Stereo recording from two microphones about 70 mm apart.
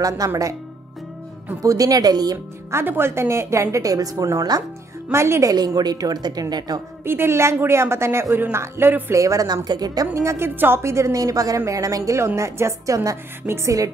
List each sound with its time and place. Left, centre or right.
0.2 s speech: right
1.6 s speech: right
2.3 s a woman's voice: right
5.1 s a woman's voice: right
5.8 s speech: right
7.1 s a woman's voice: right
9.1 s a woman's voice: right
9.7 s speech: right
10.1 s a woman's voice: right
10.5 s a woman's voice: right
10.8 s a woman's voice: right
12.4 s a woman's voice: right